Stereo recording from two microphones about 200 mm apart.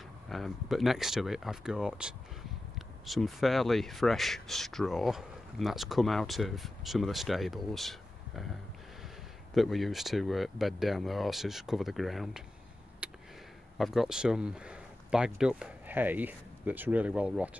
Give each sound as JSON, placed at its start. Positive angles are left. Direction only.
{"t": 0.3, "sound": "speech", "side_deg": 0}
{"t": 13.0, "sound": "a sound", "side_deg": -5}
{"t": 13.7, "sound": "speech", "side_deg": 0}